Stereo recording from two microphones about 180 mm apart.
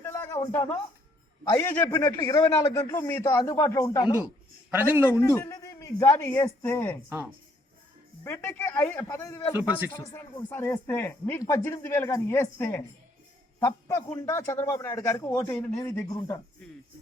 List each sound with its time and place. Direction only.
0.0 s a sound: 10° left (ahead or behind)
1.5 s speech: 15° left (ahead or behind)
4.7 s a man's voice: 10° right (ahead or behind)
5.2 s speech: 15° left (ahead or behind)
7.1 s a man's voice: 10° right (ahead or behind)
8.2 s speech: 15° left (ahead or behind)